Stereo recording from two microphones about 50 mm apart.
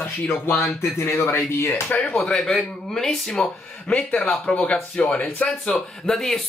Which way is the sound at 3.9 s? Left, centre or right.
Left.